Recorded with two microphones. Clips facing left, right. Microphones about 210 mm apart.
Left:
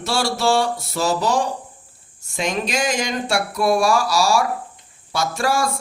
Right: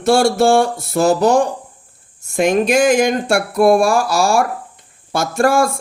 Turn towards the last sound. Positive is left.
turn(degrees=-55)  # may be behind; listen again after turning